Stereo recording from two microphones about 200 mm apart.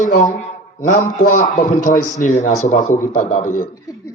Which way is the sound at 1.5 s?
40° left (ahead or behind).